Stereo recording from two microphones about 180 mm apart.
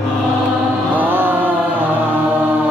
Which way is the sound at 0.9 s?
10° right (ahead or behind).